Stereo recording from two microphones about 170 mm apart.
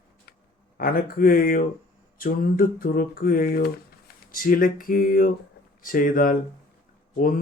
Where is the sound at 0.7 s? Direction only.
60° left (ahead or behind).